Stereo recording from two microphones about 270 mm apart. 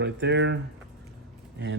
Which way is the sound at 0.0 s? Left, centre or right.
Right.